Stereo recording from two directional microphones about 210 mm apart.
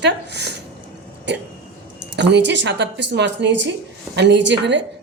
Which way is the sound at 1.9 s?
55° right (ahead or behind).